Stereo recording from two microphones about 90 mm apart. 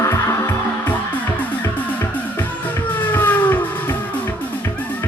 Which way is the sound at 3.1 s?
20° left (ahead or behind).